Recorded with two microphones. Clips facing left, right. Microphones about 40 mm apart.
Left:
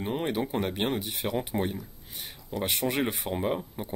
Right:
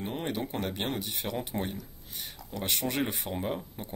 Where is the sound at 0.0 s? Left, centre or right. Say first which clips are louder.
Left 4 dB; centre.